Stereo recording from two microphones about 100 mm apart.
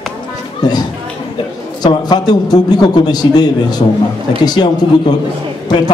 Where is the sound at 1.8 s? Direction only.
45° left (ahead or behind).